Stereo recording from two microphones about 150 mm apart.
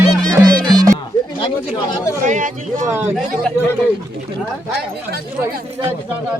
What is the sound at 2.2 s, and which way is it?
Music, 60° right (ahead or behind).